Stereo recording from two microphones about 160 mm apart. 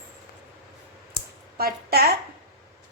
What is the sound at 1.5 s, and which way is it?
Speech, 75° right (ahead or behind).